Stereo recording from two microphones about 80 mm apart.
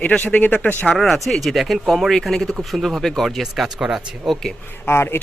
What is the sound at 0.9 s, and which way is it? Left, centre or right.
Speech, centre.